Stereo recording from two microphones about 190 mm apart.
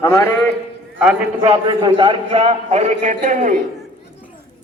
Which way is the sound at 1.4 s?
25° right (ahead or behind).